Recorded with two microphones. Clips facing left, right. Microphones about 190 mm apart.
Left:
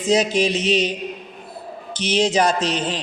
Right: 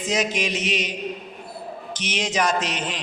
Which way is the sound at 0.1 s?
30° left (ahead or behind).